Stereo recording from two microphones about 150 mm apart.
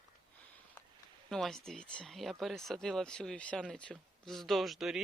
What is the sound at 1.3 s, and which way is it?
Speech, centre (ahead or behind).